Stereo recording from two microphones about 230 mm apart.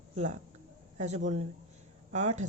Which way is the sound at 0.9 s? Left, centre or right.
Right.